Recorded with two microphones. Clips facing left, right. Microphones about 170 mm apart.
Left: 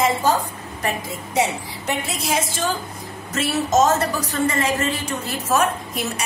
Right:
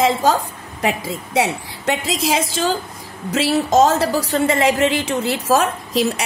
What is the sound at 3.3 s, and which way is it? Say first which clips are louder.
A woman's voice: right 4 dB; 90° right.